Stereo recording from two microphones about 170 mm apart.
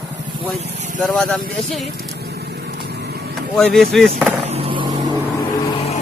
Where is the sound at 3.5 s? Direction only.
Centre (ahead or behind).